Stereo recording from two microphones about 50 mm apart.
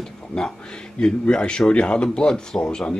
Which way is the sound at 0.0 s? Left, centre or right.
Centre.